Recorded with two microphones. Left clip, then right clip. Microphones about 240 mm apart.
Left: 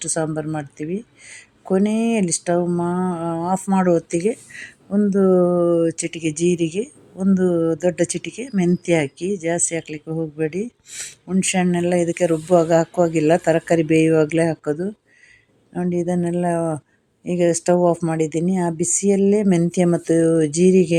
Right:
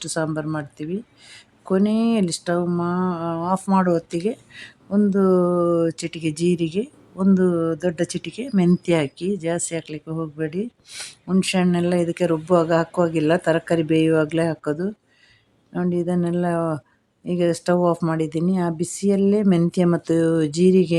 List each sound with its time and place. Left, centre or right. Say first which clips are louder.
0.0 s speech: left 1 dB; centre